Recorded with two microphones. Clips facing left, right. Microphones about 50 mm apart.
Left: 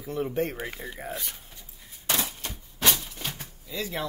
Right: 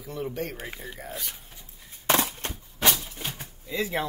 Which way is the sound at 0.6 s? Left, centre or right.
Centre.